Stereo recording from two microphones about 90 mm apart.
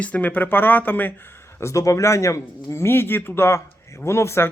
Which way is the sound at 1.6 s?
35° left (ahead or behind).